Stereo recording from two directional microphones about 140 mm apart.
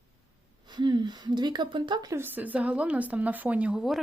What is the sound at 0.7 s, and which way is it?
A woman's voice, 35° right (ahead or behind).